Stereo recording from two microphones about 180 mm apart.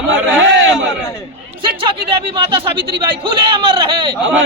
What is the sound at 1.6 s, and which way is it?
Speech, 30° right (ahead or behind).